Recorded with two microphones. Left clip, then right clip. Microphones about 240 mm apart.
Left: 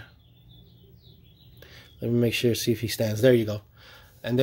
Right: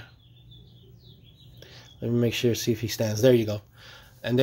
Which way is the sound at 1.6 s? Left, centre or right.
Centre.